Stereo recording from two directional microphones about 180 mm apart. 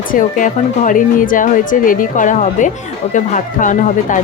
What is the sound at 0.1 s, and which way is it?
Speech, 45° left (ahead or behind).